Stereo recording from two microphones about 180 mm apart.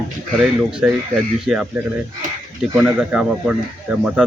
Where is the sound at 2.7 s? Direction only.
5° right (ahead or behind).